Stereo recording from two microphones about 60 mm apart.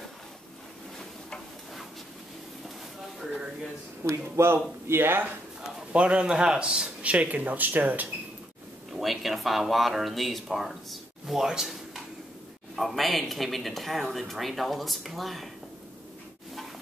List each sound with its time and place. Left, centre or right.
4.1 s speech: right
5.6 s a man's voice: centre
7.0 s speech: right
8.9 s speech: centre